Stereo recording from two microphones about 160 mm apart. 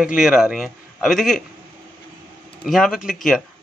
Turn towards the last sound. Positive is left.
turn(degrees=0)  # may be behind; listen again after turning